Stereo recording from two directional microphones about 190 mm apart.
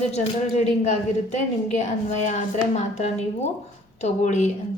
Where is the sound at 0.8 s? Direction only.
40° left (ahead or behind).